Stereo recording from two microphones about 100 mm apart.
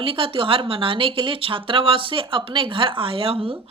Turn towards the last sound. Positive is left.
turn(degrees=-65)  # may be behind; listen again after turning